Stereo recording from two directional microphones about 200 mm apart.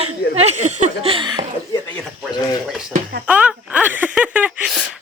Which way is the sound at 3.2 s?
5° right (ahead or behind).